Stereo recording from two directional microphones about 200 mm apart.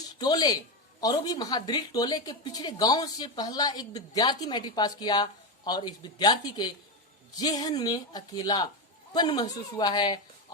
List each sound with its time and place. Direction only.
0.2 s speech: 20° left (ahead or behind)